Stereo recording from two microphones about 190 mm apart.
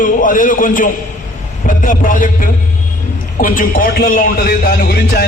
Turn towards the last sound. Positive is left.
turn(degrees=50)  # may be behind; listen again after turning